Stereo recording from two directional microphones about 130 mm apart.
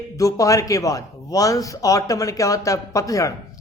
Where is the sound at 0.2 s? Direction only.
25° left (ahead or behind).